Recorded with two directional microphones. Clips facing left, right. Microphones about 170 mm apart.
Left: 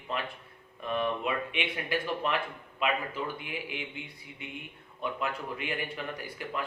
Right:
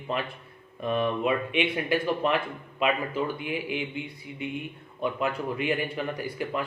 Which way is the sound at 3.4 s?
20° right (ahead or behind).